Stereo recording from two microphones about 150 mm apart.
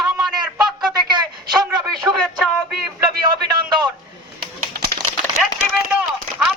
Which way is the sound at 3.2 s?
30° right (ahead or behind).